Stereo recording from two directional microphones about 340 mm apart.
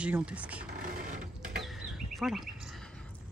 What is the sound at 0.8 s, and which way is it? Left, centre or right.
Sewing machine, right.